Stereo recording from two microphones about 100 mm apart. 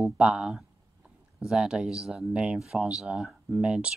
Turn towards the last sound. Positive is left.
turn(degrees=-10)  # may be behind; listen again after turning